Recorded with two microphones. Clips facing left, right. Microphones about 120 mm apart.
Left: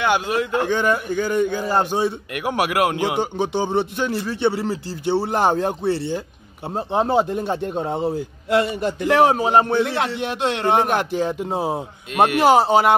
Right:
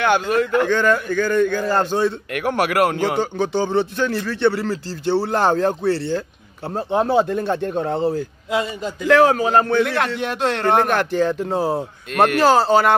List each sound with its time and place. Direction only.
0.0 s a man's voice: 10° left (ahead or behind)
3.2 s speech: 20° left (ahead or behind)
8.5 s a man's voice: 70° left (ahead or behind)
9.0 s speech: 25° left (ahead or behind)
9.9 s a man's voice: 55° right (ahead or behind)
10.6 s a man's voice: 20° left (ahead or behind)
11.6 s speech: 5° left (ahead or behind)
12.4 s speech: 20° left (ahead or behind)